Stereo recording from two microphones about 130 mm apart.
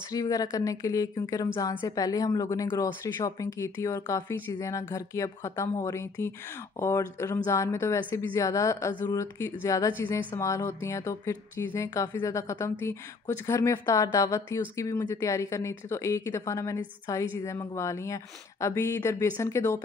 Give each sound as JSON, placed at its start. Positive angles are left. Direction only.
{"t": 0.1, "sound": "speech", "side_deg": 30}